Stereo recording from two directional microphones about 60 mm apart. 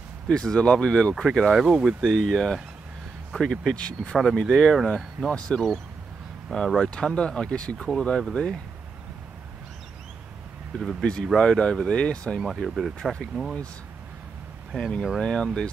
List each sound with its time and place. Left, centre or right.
0.3 s speech: centre
1.5 s speech: centre
2.0 s speech: centre
6.8 s speech: centre
11.0 s speech: centre
12.4 s speech: centre
14.8 s speech: centre